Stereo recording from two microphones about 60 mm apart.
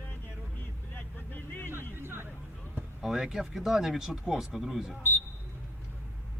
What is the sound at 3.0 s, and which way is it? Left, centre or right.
Speech, centre.